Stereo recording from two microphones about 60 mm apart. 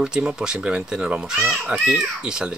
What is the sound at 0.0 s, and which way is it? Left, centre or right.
Speech, centre.